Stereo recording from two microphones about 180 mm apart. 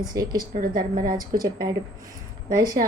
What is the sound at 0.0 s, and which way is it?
Speech, 20° right (ahead or behind).